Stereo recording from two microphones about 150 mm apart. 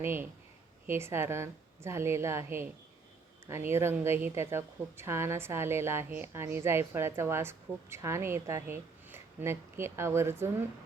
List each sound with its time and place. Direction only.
0.0 s speech: 15° right (ahead or behind)